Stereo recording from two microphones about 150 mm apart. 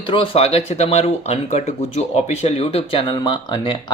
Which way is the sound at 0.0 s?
35° left (ahead or behind).